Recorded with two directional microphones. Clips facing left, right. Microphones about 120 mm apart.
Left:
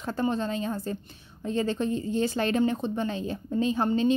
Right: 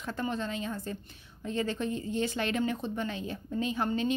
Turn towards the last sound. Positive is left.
turn(degrees=30)  # may be behind; listen again after turning